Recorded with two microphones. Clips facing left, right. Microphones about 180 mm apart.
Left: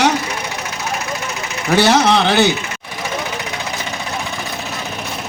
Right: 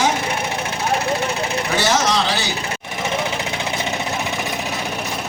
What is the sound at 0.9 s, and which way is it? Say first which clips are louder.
Vehicle: right 5 dB; 30° right (ahead or behind).